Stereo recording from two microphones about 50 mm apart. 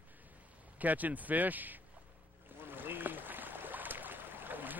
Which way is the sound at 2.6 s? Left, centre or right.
Right.